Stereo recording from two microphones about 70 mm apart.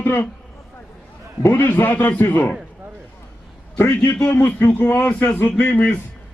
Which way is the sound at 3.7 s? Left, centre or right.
Left.